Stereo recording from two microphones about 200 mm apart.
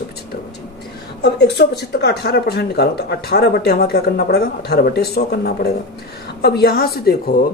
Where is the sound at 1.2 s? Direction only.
60° left (ahead or behind).